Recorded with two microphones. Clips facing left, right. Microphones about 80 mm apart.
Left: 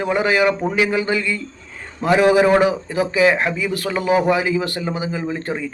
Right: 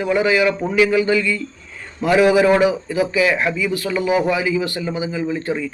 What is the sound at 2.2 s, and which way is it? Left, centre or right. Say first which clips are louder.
A man's voice: even; left.